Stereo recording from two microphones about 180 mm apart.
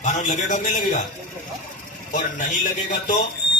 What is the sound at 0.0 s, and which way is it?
A man's voice, 45° left (ahead or behind).